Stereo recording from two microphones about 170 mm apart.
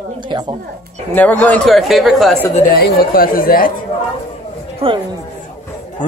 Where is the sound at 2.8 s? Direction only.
60° left (ahead or behind).